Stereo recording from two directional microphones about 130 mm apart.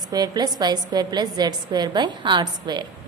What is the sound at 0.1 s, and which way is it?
A woman's voice, 30° right (ahead or behind).